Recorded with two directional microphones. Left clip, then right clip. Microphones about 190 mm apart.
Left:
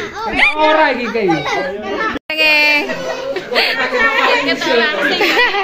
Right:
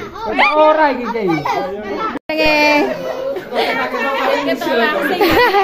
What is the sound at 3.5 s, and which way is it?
Chatter, 10° right (ahead or behind).